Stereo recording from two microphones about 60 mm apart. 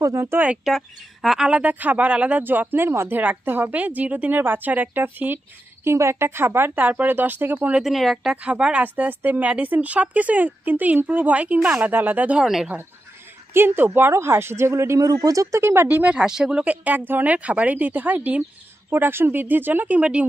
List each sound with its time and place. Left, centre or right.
0.0 s speech: right
0.7 s a woman's voice: centre
1.5 s speech: right
5.9 s speech: right
7.8 s a woman's voice: centre
8.4 s speech: centre
12.4 s a woman's voice: centre
13.5 s speech: right
15.0 s speech: right
15.5 s speech: right
16.0 s speech: centre
16.6 s speech: right
20.0 s speech: right